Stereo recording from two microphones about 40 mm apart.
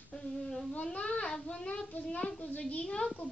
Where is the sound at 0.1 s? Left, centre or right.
Left.